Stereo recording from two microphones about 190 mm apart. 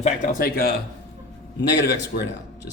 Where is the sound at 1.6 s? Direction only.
65° left (ahead or behind).